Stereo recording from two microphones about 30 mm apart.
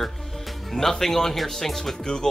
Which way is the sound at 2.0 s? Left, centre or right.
Left.